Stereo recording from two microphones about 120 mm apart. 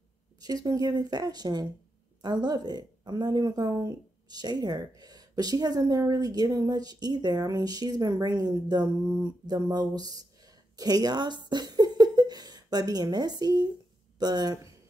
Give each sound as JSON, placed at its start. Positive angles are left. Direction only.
{"t": 0.4, "sound": "speech", "side_deg": -30}
{"t": 11.4, "sound": "a sound", "side_deg": -35}
{"t": 14.1, "sound": "speech", "side_deg": -35}